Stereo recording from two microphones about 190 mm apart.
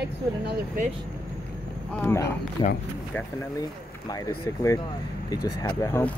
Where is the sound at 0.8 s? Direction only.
45° right (ahead or behind).